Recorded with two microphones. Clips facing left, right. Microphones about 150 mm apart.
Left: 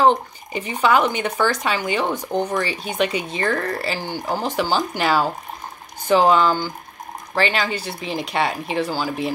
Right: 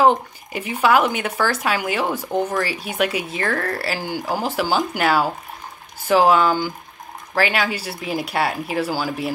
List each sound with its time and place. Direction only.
0.0 s speech: 5° right (ahead or behind)